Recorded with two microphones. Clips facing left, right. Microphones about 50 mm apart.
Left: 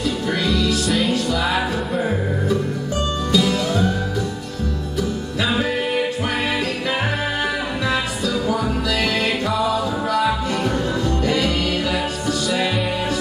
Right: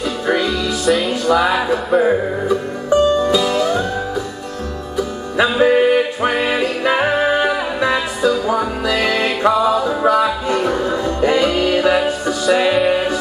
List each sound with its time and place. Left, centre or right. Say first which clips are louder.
0.3 s music: right 4 dB; centre
0.8 s music: right 5 dB; centre
5.6 s music: right 8 dB; right